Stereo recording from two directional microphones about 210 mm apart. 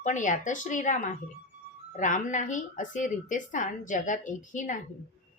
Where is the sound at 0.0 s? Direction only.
35° left (ahead or behind).